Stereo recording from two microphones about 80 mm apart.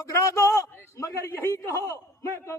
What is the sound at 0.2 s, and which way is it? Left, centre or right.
A man's voice, left.